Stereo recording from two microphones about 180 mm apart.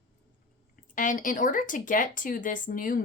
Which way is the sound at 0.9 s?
45° left (ahead or behind).